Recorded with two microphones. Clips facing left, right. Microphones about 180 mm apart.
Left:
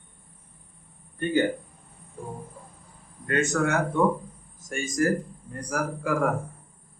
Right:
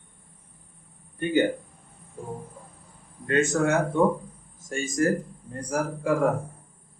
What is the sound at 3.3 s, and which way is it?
Speech, 30° right (ahead or behind).